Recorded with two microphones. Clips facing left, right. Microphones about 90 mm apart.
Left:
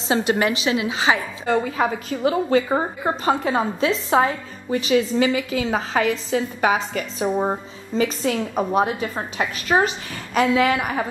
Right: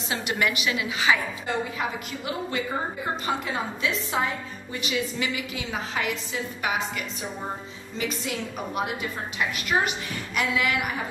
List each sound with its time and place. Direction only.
0.1 s a woman's voice: 30° left (ahead or behind)